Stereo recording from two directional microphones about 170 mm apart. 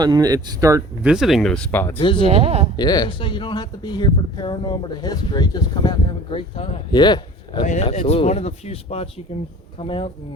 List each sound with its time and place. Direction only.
0.0 s speech: 20° right (ahead or behind)
1.0 s speech: 5° right (ahead or behind)
2.0 s speech: 30° left (ahead or behind)
2.2 s speech: 40° right (ahead or behind)
2.7 s speech: 25° left (ahead or behind)
7.6 s speech: 45° left (ahead or behind)